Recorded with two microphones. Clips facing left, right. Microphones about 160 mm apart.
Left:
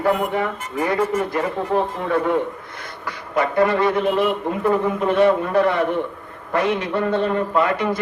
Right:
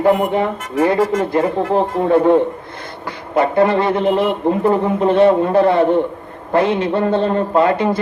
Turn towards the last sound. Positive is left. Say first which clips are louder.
# right 5 dB
turn(degrees=-30)  # may be behind; listen again after turning